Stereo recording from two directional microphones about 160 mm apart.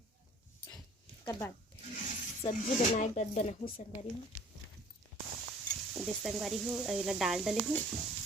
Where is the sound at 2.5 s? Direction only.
50° left (ahead or behind).